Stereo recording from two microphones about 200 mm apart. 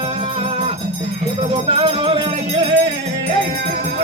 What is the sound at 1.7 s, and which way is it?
Music, 25° right (ahead or behind).